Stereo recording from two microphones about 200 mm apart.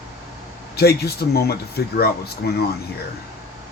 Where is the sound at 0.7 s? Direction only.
50° left (ahead or behind).